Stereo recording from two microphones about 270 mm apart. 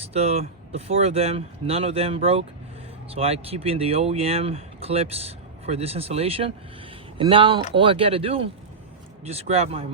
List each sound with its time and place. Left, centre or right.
0.1 s speech: right